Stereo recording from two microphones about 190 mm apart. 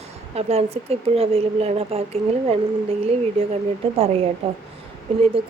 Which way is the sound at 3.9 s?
30° right (ahead or behind).